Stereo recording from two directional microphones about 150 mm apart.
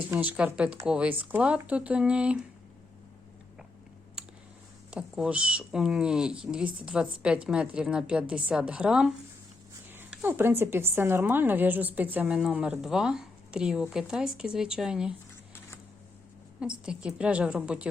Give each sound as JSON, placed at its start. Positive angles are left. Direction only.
{"t": 0.1, "sound": "a woman's voice", "side_deg": -10}
{"t": 4.9, "sound": "a woman's voice", "side_deg": -5}
{"t": 10.2, "sound": "a woman's voice", "side_deg": -15}
{"t": 16.8, "sound": "a woman's voice", "side_deg": -5}